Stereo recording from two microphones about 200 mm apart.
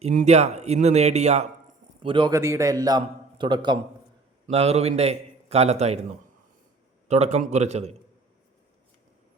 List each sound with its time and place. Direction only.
0.0 s a man's voice: 40° right (ahead or behind)
2.4 s a man's voice: 15° right (ahead or behind); by 6.0 s 30° right (ahead or behind)
7.1 s speech: 30° right (ahead or behind)